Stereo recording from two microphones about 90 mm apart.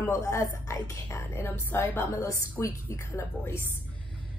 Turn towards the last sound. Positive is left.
turn(degrees=30)  # may be behind; listen again after turning